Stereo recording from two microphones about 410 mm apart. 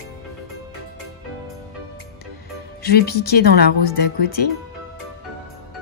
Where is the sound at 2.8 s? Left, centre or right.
Left.